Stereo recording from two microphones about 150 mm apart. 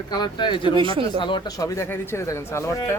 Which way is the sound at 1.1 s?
30° left (ahead or behind).